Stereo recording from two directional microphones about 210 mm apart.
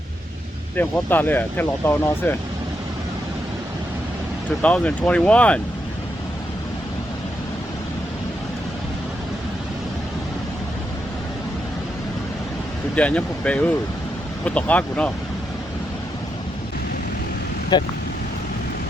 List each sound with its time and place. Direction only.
0.8 s speech: 10° left (ahead or behind)
4.6 s speech: 5° left (ahead or behind)
13.0 s speech: 5° left (ahead or behind)
17.7 s speech: 20° left (ahead or behind)